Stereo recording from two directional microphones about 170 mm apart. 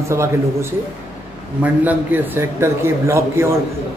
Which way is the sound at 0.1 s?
15° right (ahead or behind).